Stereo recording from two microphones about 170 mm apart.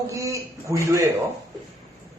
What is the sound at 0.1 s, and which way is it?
Speech, 20° right (ahead or behind).